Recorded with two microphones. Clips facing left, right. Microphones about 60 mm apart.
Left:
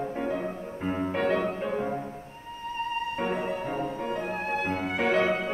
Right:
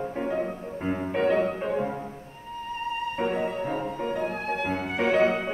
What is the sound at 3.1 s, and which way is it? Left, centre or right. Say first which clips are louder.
Music: right 2 dB; centre.